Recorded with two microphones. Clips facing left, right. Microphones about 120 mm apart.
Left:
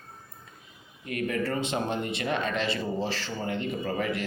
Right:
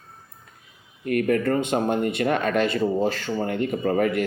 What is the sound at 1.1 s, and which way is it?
Speech, 50° right (ahead or behind).